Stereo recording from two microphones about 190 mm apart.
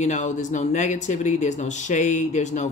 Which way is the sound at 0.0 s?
40° left (ahead or behind).